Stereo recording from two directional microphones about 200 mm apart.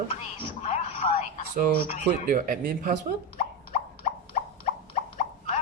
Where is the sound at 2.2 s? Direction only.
45° right (ahead or behind).